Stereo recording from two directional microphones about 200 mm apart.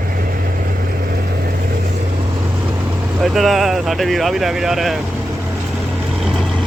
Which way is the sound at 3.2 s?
Centre (ahead or behind).